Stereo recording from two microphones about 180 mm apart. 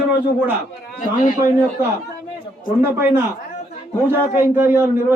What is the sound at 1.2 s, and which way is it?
Speech, 45° left (ahead or behind).